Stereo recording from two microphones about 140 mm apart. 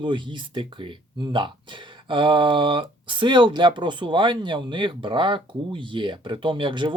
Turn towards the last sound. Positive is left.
turn(degrees=-35)  # may be behind; listen again after turning